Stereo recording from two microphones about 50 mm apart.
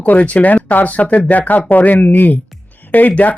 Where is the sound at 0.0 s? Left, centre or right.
Left.